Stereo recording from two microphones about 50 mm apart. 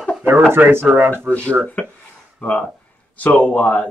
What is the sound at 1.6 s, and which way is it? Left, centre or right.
Speech, centre.